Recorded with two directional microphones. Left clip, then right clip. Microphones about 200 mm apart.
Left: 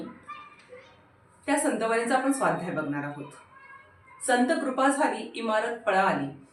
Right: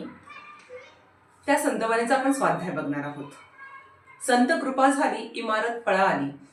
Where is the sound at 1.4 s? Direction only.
10° left (ahead or behind).